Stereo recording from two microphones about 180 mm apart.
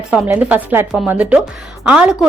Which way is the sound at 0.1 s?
10° right (ahead or behind).